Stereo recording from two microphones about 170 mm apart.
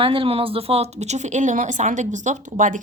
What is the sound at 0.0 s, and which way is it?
Speech, 30° right (ahead or behind).